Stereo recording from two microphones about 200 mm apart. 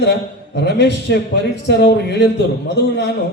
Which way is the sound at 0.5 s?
60° left (ahead or behind).